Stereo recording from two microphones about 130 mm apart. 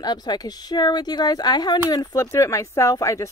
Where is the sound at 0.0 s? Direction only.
30° left (ahead or behind).